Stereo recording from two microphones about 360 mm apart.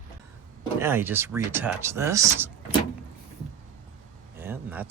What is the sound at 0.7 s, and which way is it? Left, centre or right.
Speech, centre.